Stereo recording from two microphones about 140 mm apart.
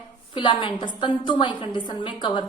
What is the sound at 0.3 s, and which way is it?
A woman's voice, 35° left (ahead or behind).